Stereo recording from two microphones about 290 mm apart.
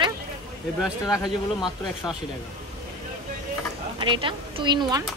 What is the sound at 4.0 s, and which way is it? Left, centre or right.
A woman's voice, centre.